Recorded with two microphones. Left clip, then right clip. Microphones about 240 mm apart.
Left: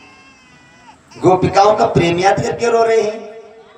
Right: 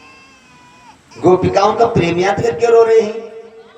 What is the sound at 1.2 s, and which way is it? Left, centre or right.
Speech, left.